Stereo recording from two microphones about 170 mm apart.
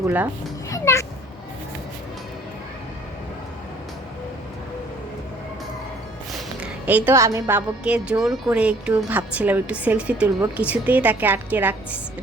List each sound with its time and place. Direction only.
0.7 s music: 15° left (ahead or behind)
6.3 s a woman's voice: 10° right (ahead or behind)